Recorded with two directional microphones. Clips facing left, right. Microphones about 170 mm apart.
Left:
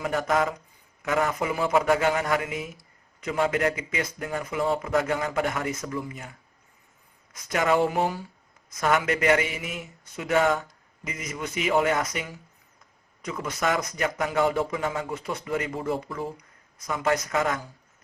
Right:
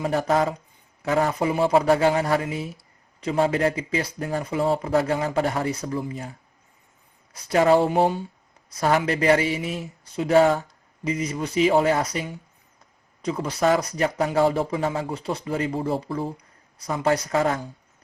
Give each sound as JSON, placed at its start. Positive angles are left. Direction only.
{"t": 0.0, "sound": "a man's voice", "side_deg": -30}
{"t": 7.4, "sound": "a man's voice", "side_deg": -30}